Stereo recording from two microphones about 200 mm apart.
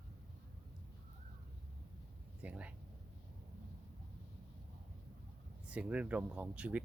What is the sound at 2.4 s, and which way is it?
Speech, 5° right (ahead or behind).